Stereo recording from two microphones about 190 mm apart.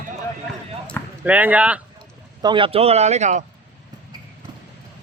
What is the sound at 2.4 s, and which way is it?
Speech, 25° right (ahead or behind).